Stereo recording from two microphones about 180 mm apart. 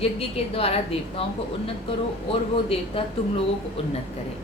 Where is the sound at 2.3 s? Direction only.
30° left (ahead or behind).